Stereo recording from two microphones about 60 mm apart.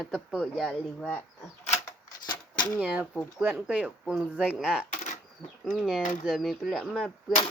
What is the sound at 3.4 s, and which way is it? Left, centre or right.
Speech, right.